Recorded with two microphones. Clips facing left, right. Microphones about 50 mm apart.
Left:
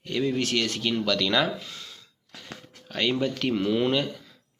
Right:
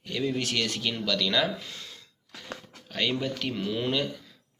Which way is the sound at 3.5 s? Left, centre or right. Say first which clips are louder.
Left 6 dB; left.